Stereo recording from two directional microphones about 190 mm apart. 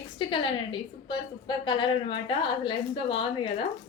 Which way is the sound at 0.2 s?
25° left (ahead or behind).